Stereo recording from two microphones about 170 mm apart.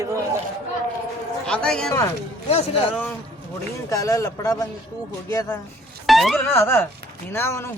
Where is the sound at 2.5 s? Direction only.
35° left (ahead or behind).